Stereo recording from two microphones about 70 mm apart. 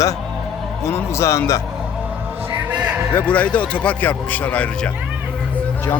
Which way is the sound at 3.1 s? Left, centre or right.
Left.